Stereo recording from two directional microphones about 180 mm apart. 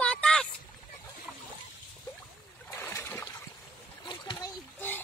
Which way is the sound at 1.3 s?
Centre (ahead or behind).